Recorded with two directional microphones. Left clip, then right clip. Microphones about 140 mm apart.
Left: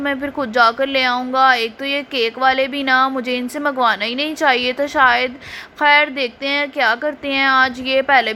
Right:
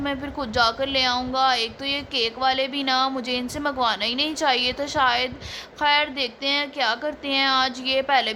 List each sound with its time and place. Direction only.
0.0 s a woman's voice: 25° left (ahead or behind)